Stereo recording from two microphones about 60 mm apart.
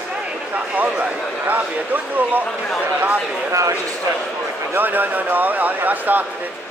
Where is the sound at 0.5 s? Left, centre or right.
Right.